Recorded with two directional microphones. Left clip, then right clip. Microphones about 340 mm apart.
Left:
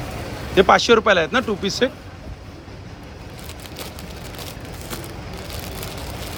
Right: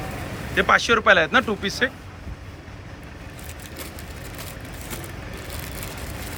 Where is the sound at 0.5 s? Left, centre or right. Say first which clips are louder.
Left 4 dB; centre.